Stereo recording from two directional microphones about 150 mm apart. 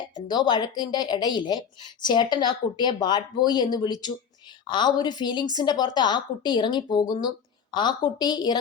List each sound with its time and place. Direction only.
0.3 s a woman's voice: 30° left (ahead or behind)